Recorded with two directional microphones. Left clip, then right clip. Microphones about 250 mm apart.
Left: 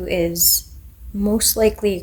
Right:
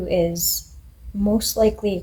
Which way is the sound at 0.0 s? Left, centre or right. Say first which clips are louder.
Left 1 dB; left.